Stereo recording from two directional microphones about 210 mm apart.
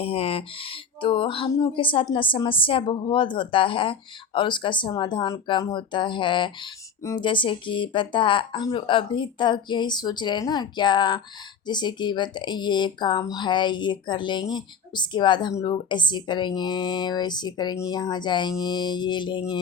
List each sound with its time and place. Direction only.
0.0 s speech: 25° left (ahead or behind)